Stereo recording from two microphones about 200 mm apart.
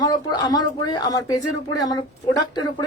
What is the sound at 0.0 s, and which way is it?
Speech, 20° left (ahead or behind).